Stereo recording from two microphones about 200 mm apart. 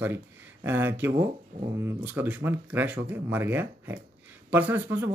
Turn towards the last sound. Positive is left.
turn(degrees=-10)  # may be behind; listen again after turning